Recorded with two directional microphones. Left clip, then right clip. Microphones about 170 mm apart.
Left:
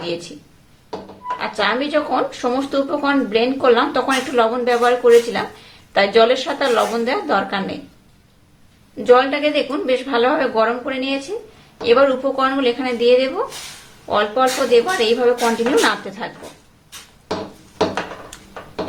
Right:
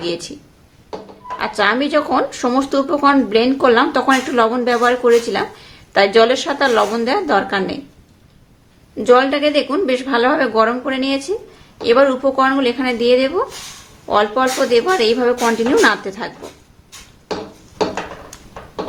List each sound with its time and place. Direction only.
0.0 s speech: 30° right (ahead or behind)
1.4 s a woman's voice: 30° right (ahead or behind)
9.0 s a woman's voice: 35° right (ahead or behind)